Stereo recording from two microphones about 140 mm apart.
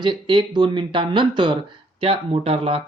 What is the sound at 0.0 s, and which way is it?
Speech, 35° right (ahead or behind).